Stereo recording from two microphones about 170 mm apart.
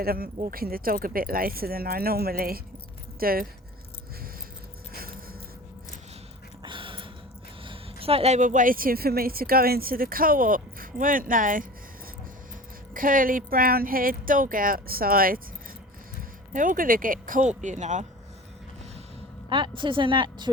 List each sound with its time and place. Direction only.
0.0 s a woman's voice: 60° right (ahead or behind)
4.9 s a sound: 60° right (ahead or behind)
6.6 s a sound: 30° right (ahead or behind)
7.6 s a woman's voice: 30° right (ahead or behind); by 11.6 s 55° right (ahead or behind)
12.9 s a woman's voice: 55° right (ahead or behind)
16.5 s speech: 50° right (ahead or behind)
19.5 s a woman's voice: 30° right (ahead or behind)